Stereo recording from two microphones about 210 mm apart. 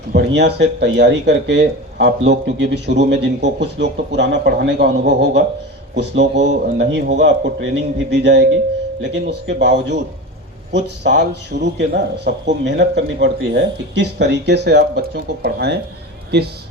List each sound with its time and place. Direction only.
0.1 s speech: 55° right (ahead or behind)
6.3 s a man's voice: 35° right (ahead or behind)
6.7 s a man's voice: 55° right (ahead or behind)